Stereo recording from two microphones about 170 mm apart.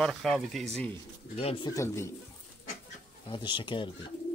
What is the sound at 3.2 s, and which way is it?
Speech, 25° left (ahead or behind).